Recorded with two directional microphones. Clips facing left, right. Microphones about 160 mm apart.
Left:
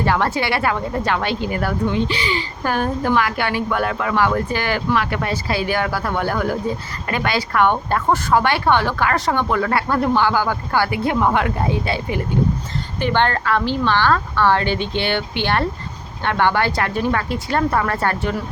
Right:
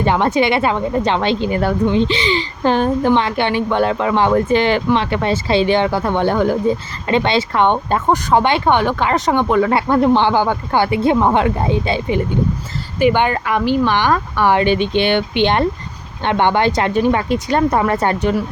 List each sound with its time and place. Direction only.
0.0 s a woman's voice: 20° right (ahead or behind)
13.0 s a woman's voice: 10° right (ahead or behind)